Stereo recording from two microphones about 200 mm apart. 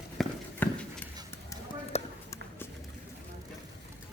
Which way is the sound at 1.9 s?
35° left (ahead or behind).